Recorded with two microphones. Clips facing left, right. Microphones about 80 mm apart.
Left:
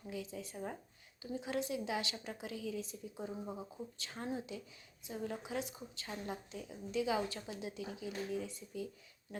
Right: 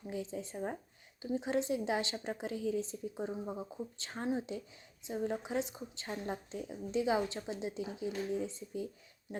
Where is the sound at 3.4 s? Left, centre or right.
Centre.